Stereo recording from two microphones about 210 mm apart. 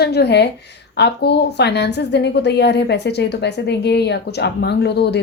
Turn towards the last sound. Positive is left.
turn(degrees=50)  # may be behind; listen again after turning